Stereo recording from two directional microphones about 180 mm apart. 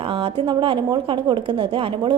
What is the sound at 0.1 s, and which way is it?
A woman's voice, 30° right (ahead or behind).